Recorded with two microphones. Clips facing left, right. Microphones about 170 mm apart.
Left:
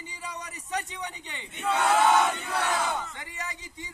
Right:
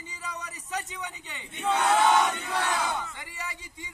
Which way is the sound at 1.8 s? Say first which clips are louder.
Left 1 dB; centre (ahead or behind).